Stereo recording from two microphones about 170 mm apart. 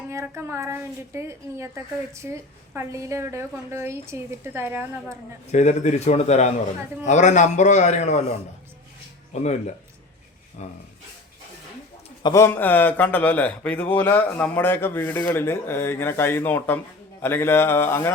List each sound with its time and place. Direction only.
0.1 s a woman's voice: 15° right (ahead or behind)
5.5 s a man's voice: 45° left (ahead or behind)
9.3 s a man's voice: 45° left (ahead or behind)
12.2 s a man's voice: 15° left (ahead or behind)